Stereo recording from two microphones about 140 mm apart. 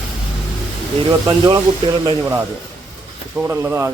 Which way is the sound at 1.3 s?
25° right (ahead or behind).